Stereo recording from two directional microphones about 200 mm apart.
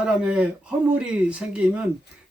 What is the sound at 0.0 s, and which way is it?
Speech, 5° right (ahead or behind).